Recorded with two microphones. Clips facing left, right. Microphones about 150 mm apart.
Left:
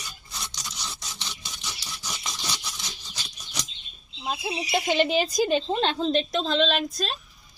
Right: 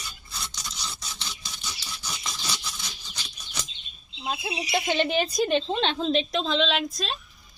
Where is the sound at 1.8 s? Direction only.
15° left (ahead or behind).